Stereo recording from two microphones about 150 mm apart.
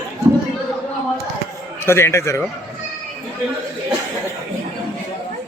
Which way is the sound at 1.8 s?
15° left (ahead or behind).